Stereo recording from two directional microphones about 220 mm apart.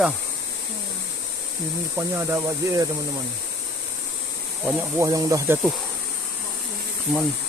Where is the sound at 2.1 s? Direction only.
15° right (ahead or behind).